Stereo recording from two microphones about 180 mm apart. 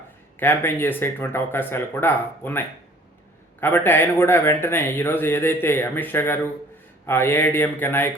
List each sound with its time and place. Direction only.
0.3 s speech: 10° left (ahead or behind)